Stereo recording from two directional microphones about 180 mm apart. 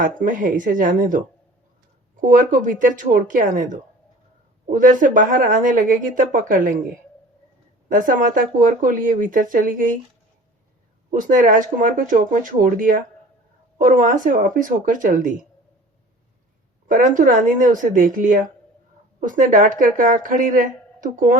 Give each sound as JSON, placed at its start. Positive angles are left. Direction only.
{"t": 0.0, "sound": "speech", "side_deg": -45}
{"t": 2.2, "sound": "speech", "side_deg": -50}
{"t": 7.9, "sound": "speech", "side_deg": -50}
{"t": 11.1, "sound": "speech", "side_deg": -50}
{"t": 16.9, "sound": "speech", "side_deg": -45}